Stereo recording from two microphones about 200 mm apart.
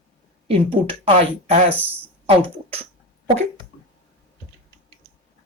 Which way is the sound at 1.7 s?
10° right (ahead or behind).